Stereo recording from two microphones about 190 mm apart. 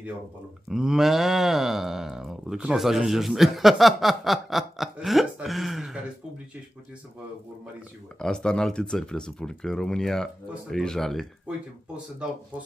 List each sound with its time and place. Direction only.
0.7 s speech: centre (ahead or behind)
8.2 s speech: 5° left (ahead or behind)